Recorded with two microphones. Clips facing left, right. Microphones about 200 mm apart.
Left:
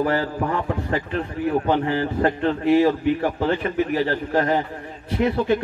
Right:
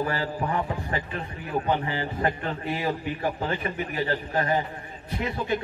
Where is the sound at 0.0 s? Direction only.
65° left (ahead or behind).